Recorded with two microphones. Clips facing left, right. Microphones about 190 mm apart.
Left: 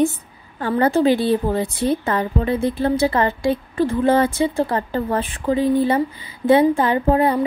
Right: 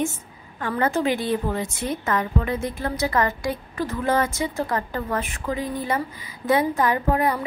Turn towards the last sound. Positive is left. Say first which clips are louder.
# left 5 dB
turn(degrees=30)  # may be behind; listen again after turning